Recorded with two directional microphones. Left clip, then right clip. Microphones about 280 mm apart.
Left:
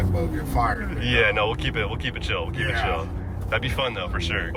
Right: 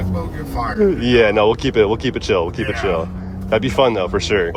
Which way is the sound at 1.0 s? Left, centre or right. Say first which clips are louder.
Right 5 dB; centre.